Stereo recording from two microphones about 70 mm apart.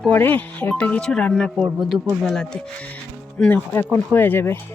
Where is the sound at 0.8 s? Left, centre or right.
Centre.